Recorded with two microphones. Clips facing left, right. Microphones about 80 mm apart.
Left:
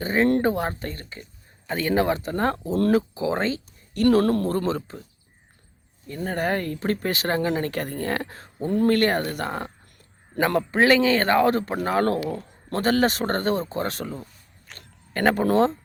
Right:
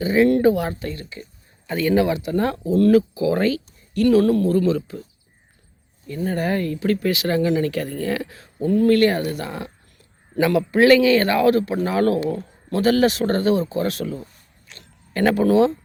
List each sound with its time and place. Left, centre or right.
0.0 s speech: left
3.9 s speech: left
6.1 s a man's voice: left
10.7 s speech: left
14.7 s a sound: left